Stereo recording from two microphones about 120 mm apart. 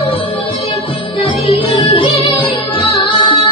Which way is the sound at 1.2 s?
50° left (ahead or behind).